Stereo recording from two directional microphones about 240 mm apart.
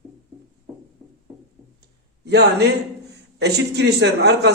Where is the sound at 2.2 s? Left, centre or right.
Right.